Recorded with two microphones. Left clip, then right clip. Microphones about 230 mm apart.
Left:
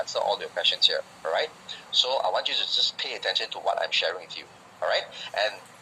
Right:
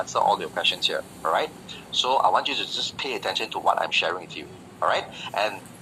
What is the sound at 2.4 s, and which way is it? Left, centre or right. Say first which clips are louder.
Speech: left 2 dB; right.